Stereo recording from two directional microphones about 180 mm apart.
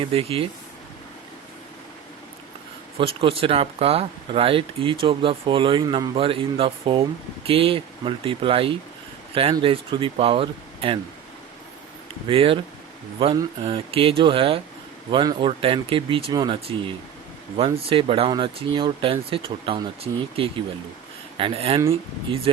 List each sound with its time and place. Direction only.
0.0 s speech: 30° right (ahead or behind)
3.0 s speech: 30° right (ahead or behind)
12.3 s speech: 30° right (ahead or behind)